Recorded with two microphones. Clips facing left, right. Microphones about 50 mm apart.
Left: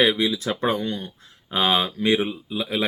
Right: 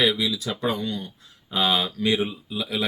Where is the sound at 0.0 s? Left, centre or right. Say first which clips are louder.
Left 3 dB; left.